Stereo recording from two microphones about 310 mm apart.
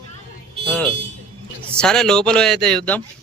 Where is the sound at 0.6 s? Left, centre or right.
Centre.